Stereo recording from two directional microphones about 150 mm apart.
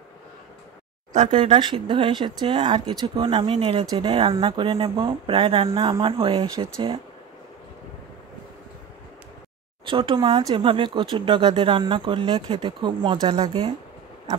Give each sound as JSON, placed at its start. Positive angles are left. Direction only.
{"t": 1.3, "sound": "speech", "side_deg": -35}
{"t": 9.8, "sound": "speech", "side_deg": -35}